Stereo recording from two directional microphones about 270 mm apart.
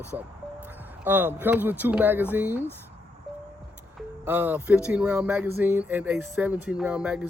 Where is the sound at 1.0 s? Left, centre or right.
Centre.